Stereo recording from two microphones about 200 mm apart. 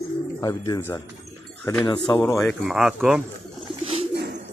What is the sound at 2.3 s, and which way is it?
Speech, centre (ahead or behind).